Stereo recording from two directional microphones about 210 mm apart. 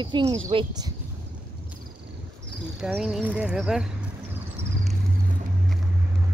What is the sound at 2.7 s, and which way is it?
Speech, 5° right (ahead or behind).